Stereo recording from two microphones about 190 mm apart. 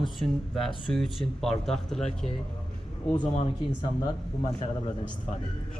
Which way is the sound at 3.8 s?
30° left (ahead or behind).